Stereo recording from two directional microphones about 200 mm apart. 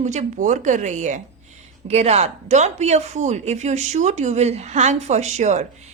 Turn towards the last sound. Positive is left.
turn(degrees=-35)  # may be behind; listen again after turning